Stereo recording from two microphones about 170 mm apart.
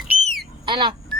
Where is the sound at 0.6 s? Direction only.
30° right (ahead or behind).